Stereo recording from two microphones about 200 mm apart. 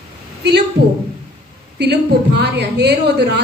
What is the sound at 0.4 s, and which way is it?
Speech, 55° right (ahead or behind).